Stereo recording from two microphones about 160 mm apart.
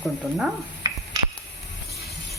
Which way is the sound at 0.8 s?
25° right (ahead or behind).